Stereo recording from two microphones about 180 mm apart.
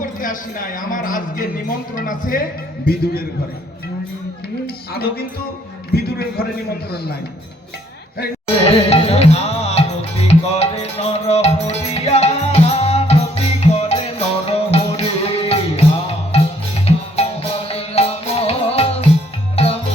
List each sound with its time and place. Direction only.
0.0 s a man's voice: 50° left (ahead or behind)
4.6 s a man's voice: 60° left (ahead or behind)
8.6 s music: 35° left (ahead or behind)